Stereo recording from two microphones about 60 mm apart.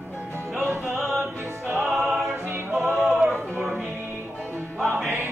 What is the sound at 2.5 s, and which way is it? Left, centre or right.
Music, right.